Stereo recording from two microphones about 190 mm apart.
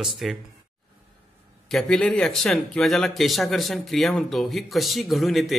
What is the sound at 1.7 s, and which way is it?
Speech, centre (ahead or behind).